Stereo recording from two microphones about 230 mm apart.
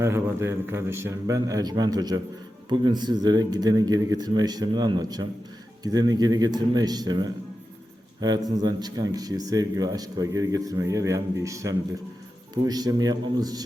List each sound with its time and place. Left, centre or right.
0.0 s speech: centre